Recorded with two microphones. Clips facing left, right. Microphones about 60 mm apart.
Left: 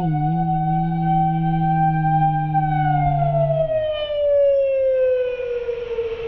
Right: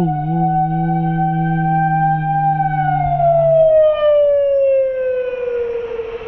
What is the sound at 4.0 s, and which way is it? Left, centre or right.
Siren, right.